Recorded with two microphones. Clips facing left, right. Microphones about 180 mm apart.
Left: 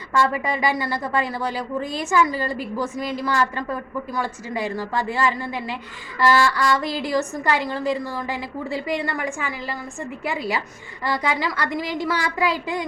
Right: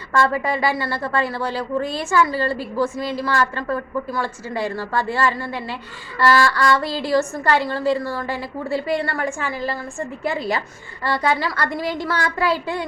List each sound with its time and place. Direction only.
0.2 s a woman's voice: 15° left (ahead or behind)